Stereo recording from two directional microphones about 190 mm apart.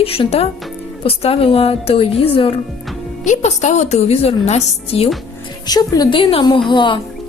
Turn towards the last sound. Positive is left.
turn(degrees=25)  # may be behind; listen again after turning